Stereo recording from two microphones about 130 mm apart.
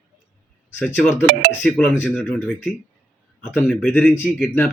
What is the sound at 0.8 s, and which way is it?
Speech, 10° left (ahead or behind).